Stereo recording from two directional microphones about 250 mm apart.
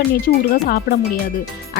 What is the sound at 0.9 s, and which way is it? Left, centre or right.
Speech, left.